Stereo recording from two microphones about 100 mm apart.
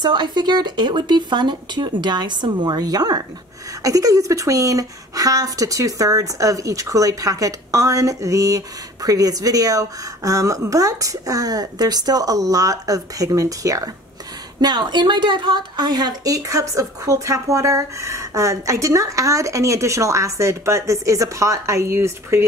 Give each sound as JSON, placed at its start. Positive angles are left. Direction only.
{"t": 0.0, "sound": "a woman's voice", "side_deg": -50}
{"t": 14.6, "sound": "a woman's voice", "side_deg": -45}